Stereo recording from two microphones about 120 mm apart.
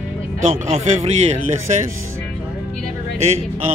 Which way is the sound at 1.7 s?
80° right.